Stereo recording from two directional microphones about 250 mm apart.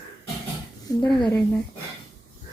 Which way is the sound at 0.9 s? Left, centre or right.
Centre.